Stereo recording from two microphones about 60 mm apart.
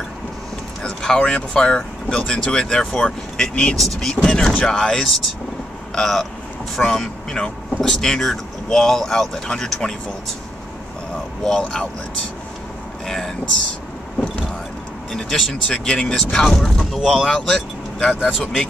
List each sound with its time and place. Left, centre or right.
0.8 s speech: centre
11.4 s speech: centre
13.0 s speech: centre
15.1 s speech: centre